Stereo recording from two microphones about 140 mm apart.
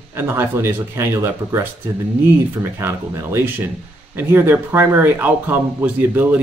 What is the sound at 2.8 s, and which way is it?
Speech, 20° right (ahead or behind).